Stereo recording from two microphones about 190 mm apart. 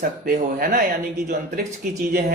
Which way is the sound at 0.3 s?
50° right (ahead or behind).